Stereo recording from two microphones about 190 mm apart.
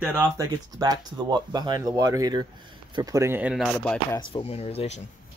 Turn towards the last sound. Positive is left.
turn(degrees=35)  # may be behind; listen again after turning